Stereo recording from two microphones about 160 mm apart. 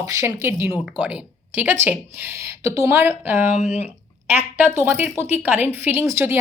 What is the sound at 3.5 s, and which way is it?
Speech, 45° left (ahead or behind).